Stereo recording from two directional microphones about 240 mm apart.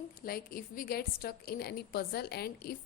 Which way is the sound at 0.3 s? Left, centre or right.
Left.